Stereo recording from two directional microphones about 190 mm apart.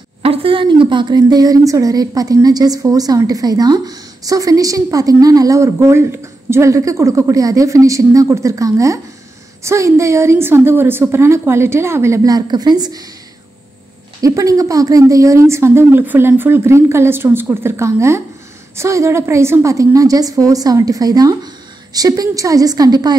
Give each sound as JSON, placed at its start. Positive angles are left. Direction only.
{"t": 0.2, "sound": "speech", "side_deg": -30}
{"t": 14.2, "sound": "speech", "side_deg": -20}